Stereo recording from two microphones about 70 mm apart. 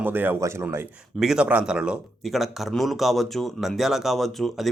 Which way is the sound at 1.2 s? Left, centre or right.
Centre.